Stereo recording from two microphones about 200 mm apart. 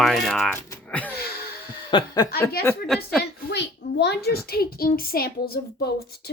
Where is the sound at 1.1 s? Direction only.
50° left (ahead or behind).